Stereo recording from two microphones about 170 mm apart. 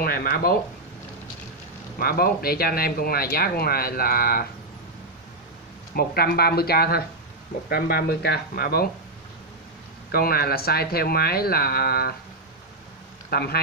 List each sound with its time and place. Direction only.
0.0 s speech: 60° left (ahead or behind)
2.0 s speech: 65° left (ahead or behind)
5.9 s speech: 65° left (ahead or behind)
10.1 s speech: 65° left (ahead or behind)
13.3 s speech: 65° left (ahead or behind)